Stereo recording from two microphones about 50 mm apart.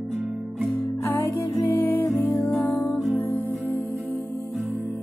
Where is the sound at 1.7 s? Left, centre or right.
Left.